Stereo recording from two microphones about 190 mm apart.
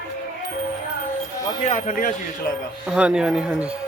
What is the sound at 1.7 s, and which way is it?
Speech, 40° left (ahead or behind).